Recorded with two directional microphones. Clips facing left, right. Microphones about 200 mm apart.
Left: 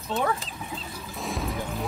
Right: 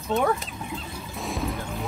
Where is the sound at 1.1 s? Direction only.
Centre (ahead or behind).